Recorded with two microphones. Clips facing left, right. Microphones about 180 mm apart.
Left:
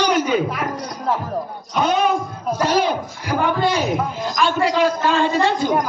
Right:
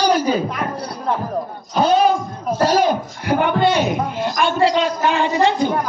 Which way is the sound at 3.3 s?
65° right (ahead or behind).